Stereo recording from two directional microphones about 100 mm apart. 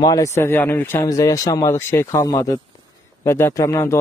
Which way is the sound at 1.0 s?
35° left (ahead or behind).